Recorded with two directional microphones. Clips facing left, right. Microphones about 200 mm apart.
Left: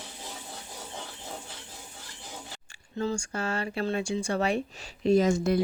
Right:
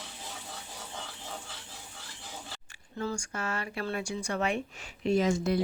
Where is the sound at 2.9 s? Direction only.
25° left (ahead or behind); by 5.6 s 45° left (ahead or behind).